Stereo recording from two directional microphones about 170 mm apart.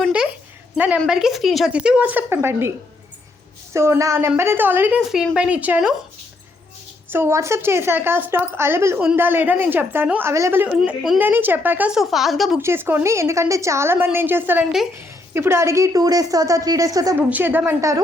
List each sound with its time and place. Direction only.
0.0 s a sound: 5° right (ahead or behind)
0.8 s a woman's voice: 5° right (ahead or behind)
7.1 s a woman's voice: 15° right (ahead or behind)
12.5 s a woman's voice: 15° right (ahead or behind)
17.2 s a woman's voice: 10° right (ahead or behind)